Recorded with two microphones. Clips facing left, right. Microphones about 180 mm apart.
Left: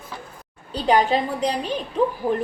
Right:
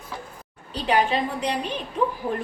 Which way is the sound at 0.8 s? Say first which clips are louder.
Left 3 dB; 35° left (ahead or behind).